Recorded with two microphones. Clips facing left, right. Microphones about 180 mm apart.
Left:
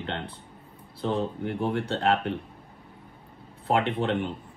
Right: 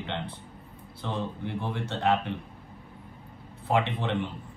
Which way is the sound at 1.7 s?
65° left (ahead or behind).